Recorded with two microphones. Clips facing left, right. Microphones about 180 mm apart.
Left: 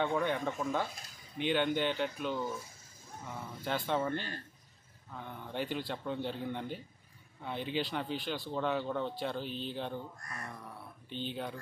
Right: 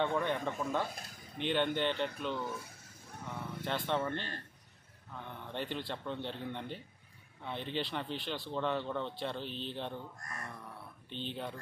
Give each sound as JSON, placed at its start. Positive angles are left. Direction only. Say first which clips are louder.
{"t": 0.0, "sound": "speech", "louder": "left 1 dB", "side_deg": 5}
{"t": 2.6, "sound": "a sound", "louder": "right 2 dB", "side_deg": -65}
{"t": 3.6, "sound": "speech", "louder": "left 2 dB", "side_deg": 5}
{"t": 11.1, "sound": "speech", "louder": "left 2 dB", "side_deg": 0}